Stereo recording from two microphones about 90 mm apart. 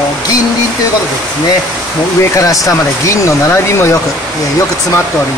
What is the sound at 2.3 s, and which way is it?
Speech, 40° left (ahead or behind).